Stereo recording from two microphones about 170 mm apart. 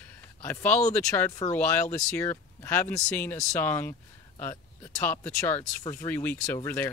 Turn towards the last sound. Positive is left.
turn(degrees=15)  # may be behind; listen again after turning